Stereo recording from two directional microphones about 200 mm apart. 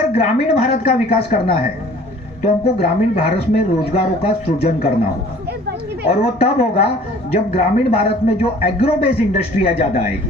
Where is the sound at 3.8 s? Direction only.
30° left (ahead or behind).